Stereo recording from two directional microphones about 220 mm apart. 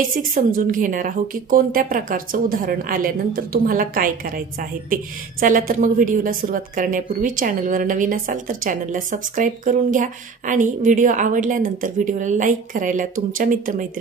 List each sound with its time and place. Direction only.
0.1 s a woman's voice: 40° right (ahead or behind)